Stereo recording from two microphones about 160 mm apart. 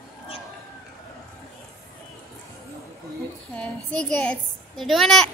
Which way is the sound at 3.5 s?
5° left (ahead or behind).